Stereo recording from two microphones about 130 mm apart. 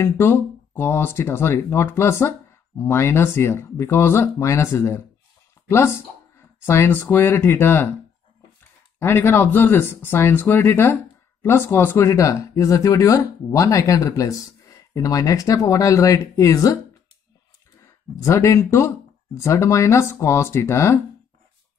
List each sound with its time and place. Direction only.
0.0 s speech: 15° left (ahead or behind)
6.6 s speech: 20° left (ahead or behind)
9.0 s speech: 15° left (ahead or behind)
18.2 s speech: 20° left (ahead or behind)